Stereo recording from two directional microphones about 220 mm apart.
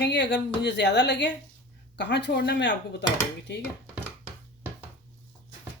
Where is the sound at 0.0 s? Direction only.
50° left (ahead or behind).